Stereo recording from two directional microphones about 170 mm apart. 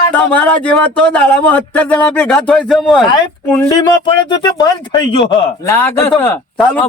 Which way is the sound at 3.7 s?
25° left (ahead or behind).